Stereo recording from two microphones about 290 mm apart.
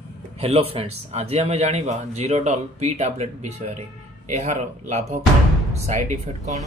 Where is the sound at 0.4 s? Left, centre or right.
Right.